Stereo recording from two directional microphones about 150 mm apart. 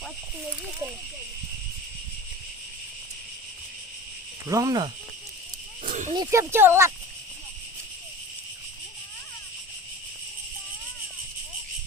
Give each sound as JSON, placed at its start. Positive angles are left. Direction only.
{"t": 4.4, "sound": "speech", "side_deg": -25}
{"t": 5.9, "sound": "roaring cats", "side_deg": -55}
{"t": 6.1, "sound": "speech", "side_deg": -15}